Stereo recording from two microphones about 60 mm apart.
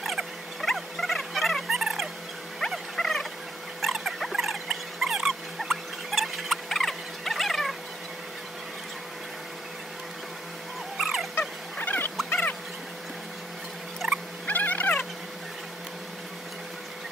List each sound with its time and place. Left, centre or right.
0.0 s a sound: centre
3.0 s fowl: centre
3.8 s rodents: centre
11.0 s dog: centre
11.3 s dog: left
12.3 s a sound: left
14.5 s frog: left